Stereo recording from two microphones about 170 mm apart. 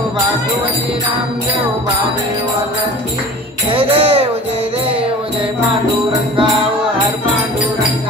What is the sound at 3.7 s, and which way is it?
Speech, 35° right (ahead or behind).